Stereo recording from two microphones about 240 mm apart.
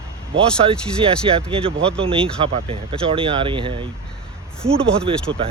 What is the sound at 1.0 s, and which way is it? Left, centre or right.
Speech, right.